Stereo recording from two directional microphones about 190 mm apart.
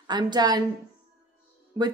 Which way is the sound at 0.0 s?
20° right (ahead or behind).